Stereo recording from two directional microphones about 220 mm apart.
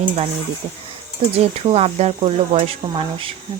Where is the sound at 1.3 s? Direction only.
30° right (ahead or behind).